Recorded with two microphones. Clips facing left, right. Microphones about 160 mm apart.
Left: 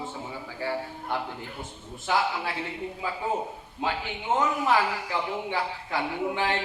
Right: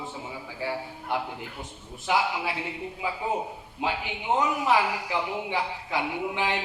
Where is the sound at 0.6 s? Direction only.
10° right (ahead or behind).